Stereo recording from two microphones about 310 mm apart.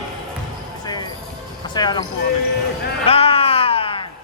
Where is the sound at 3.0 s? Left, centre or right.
Centre.